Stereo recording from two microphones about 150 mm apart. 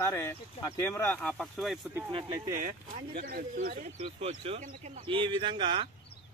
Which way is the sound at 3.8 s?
45° right (ahead or behind).